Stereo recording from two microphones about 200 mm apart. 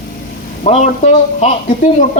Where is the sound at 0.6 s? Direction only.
35° left (ahead or behind).